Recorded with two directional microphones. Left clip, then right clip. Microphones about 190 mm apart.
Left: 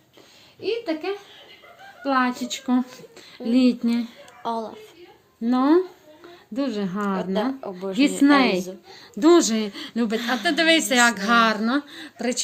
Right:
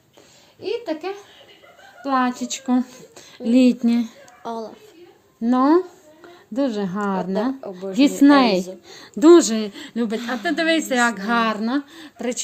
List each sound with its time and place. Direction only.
0.6 s a woman's voice: 50° right (ahead or behind)
4.4 s a woman's voice: centre (ahead or behind)
5.4 s speech: 35° right (ahead or behind)
7.6 s a woman's voice: centre (ahead or behind)
8.2 s speech: 45° right (ahead or behind); by 10.2 s 20° right (ahead or behind)
10.2 s speech: 10° left (ahead or behind)
10.4 s a woman's voice: 20° right (ahead or behind)